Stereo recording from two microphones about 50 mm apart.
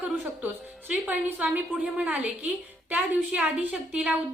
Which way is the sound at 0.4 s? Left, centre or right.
Right.